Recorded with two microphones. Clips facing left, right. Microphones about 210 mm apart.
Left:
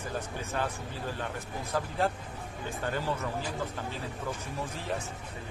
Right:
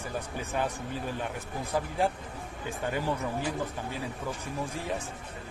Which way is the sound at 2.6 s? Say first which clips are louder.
Right 2 dB; 15° right (ahead or behind).